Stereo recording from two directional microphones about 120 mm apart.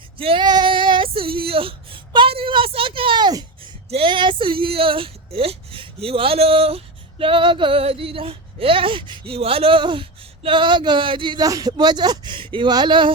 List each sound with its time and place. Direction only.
0.2 s female singing: 50° right (ahead or behind)
0.4 s child singing: 40° right (ahead or behind)
3.8 s speech: 50° right (ahead or behind)
11.4 s a man's voice: 30° right (ahead or behind)